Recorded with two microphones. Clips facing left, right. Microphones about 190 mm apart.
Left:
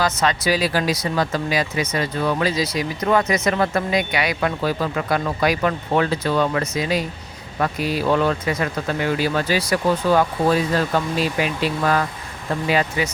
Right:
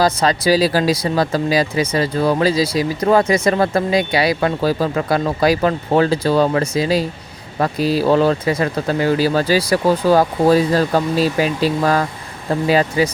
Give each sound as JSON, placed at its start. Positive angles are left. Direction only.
{"t": 0.0, "sound": "speech", "side_deg": -35}